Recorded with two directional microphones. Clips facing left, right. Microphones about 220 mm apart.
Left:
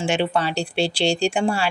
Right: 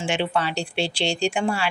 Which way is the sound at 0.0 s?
40° left (ahead or behind).